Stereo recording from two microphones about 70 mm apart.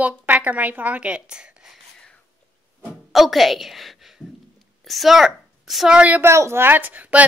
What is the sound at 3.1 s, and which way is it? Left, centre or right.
A woman's voice, centre.